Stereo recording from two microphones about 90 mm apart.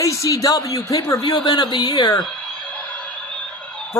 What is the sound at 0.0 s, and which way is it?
Speech, 35° left (ahead or behind).